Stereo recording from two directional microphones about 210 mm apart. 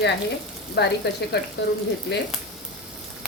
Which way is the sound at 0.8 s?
50° left (ahead or behind).